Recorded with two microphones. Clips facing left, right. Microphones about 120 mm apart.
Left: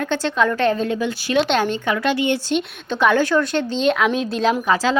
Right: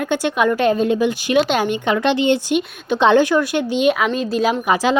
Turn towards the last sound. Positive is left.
turn(degrees=-15)  # may be behind; listen again after turning